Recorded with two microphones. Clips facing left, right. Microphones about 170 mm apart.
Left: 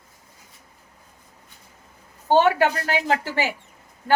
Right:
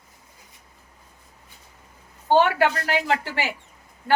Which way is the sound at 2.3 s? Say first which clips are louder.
Left 1 dB; 40° left (ahead or behind).